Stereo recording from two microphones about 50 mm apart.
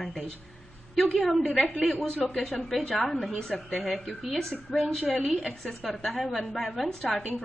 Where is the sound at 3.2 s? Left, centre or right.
Centre.